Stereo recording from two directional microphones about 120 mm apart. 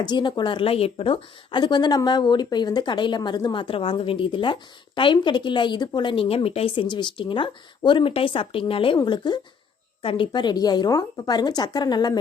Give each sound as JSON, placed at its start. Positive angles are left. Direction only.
{"t": 0.0, "sound": "a woman's voice", "side_deg": 40}